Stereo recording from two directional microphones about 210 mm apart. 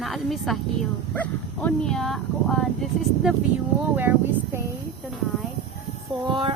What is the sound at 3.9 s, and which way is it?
Speech, 10° right (ahead or behind).